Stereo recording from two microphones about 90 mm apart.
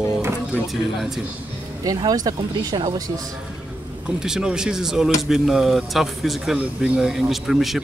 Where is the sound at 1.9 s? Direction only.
45° right (ahead or behind).